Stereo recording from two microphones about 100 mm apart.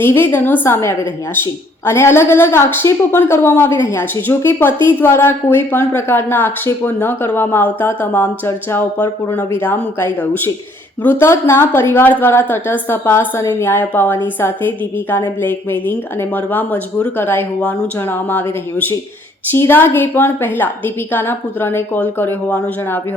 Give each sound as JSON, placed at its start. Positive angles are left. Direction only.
{"t": 0.0, "sound": "speech", "side_deg": 20}
{"t": 15.4, "sound": "speech", "side_deg": 20}